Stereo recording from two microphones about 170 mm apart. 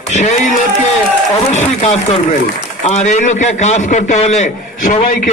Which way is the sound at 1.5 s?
40° left (ahead or behind).